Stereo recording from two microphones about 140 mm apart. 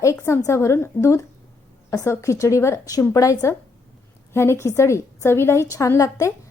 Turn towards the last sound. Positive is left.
turn(degrees=25)  # may be behind; listen again after turning